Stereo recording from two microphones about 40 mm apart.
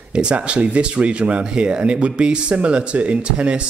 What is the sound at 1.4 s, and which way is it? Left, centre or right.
Speech, right.